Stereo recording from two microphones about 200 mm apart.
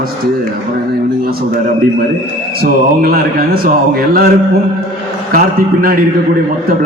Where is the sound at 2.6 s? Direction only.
45° right (ahead or behind).